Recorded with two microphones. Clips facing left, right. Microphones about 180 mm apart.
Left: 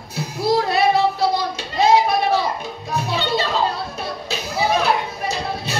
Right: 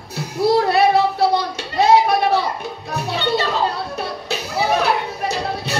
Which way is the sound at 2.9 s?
65° right (ahead or behind).